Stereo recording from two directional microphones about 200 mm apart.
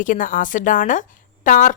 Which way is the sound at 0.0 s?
40° left (ahead or behind).